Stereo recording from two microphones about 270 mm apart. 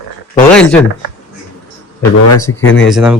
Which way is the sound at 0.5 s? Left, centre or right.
Centre.